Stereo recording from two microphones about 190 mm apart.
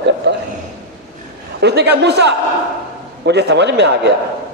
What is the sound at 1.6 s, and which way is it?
A woman's voice, 60° right (ahead or behind).